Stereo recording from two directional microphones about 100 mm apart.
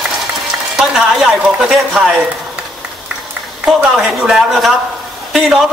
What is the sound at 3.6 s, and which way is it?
A man's voice, 5° right (ahead or behind).